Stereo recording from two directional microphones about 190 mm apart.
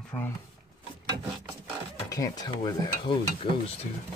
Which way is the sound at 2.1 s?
20° left (ahead or behind).